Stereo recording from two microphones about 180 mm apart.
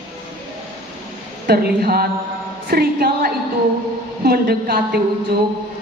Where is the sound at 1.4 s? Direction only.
60° right (ahead or behind).